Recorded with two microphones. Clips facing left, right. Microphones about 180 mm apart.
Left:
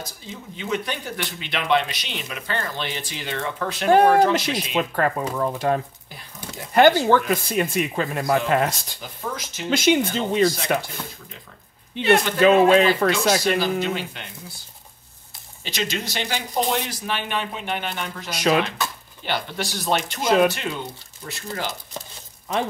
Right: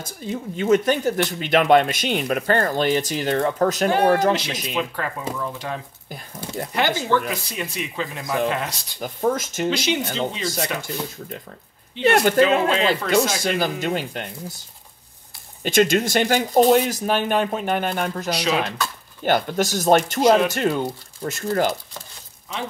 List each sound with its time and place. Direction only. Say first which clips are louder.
0.0 s speech: right 8 dB; 50° right (ahead or behind)
4.7 s speech: left 5 dB; 50° left (ahead or behind)
9.0 s speech: right 10 dB; 45° right (ahead or behind)
9.7 s speech: left 5 dB; 50° left (ahead or behind)
12.0 s speech: right 1 dB; 50° right (ahead or behind)
12.4 s speech: left 3 dB; 50° left (ahead or behind)
13.1 s speech: even; 45° right (ahead or behind)
15.6 s speech: right 10 dB; 50° right (ahead or behind)
18.3 s speech: left 4 dB; 50° left (ahead or behind)
19.2 s speech: right 7 dB; 45° right (ahead or behind)